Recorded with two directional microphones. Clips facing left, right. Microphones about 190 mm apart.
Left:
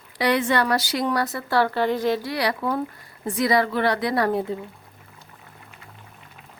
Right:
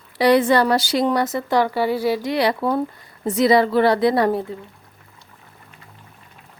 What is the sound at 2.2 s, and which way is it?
Speech, 25° right (ahead or behind).